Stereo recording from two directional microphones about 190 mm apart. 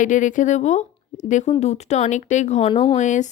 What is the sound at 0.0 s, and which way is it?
A woman's voice, 40° left (ahead or behind).